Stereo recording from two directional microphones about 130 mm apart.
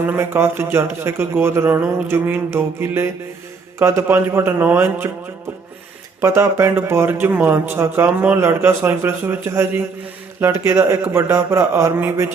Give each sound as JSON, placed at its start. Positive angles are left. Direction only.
{"t": 0.0, "sound": "a man's voice", "side_deg": -15}
{"t": 6.1, "sound": "a man's voice", "side_deg": -20}